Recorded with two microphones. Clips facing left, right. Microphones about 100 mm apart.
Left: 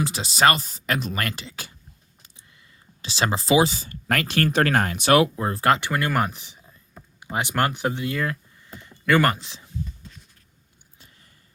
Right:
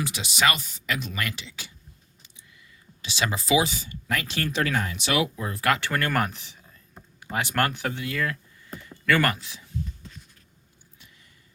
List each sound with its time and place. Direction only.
0.0 s speech: 35° left (ahead or behind)
3.0 s speech: 35° left (ahead or behind)
3.8 s speech: 50° left (ahead or behind); by 5.8 s 30° left (ahead or behind)
5.8 s speech: 15° left (ahead or behind)